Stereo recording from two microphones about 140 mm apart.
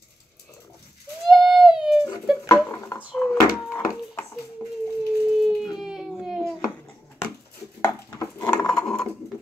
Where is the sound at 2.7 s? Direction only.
15° left (ahead or behind).